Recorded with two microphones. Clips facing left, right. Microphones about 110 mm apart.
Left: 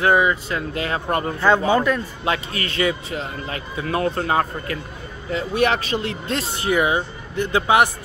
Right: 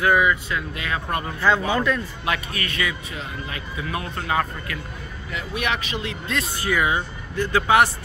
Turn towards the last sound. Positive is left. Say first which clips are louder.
# left 1 dB
turn(degrees=20)  # may be behind; listen again after turning